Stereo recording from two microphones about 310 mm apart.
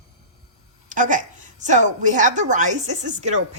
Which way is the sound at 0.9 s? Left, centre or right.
Right.